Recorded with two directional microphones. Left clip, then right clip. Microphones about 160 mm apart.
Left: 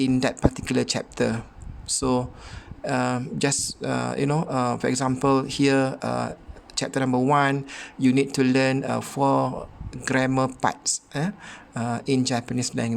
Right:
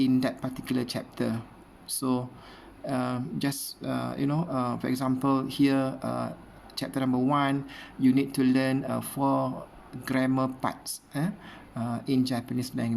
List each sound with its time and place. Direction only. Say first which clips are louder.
0.0 s speech: left 5 dB; 45° left (ahead or behind)